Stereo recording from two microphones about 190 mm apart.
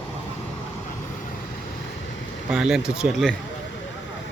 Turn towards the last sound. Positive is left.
turn(degrees=0)  # may be behind; listen again after turning